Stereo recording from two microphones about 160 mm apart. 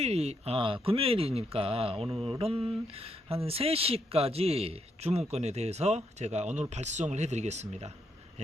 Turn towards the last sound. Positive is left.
turn(degrees=-45)  # may be behind; listen again after turning